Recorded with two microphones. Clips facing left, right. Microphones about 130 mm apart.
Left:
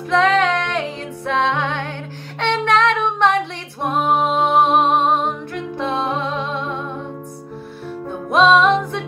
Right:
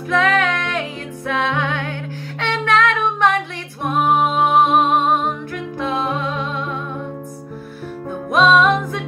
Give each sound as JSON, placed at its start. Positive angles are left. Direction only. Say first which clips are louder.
{"t": 0.1, "sound": "music", "louder": "left 2 dB", "side_deg": 25}
{"t": 2.4, "sound": "child singing", "louder": "left 1 dB", "side_deg": 30}
{"t": 3.8, "sound": "music", "louder": "right 1 dB", "side_deg": 30}
{"t": 8.4, "sound": "music", "louder": "left 1 dB", "side_deg": 25}